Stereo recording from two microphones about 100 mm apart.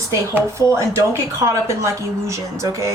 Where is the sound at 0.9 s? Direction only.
30° right (ahead or behind).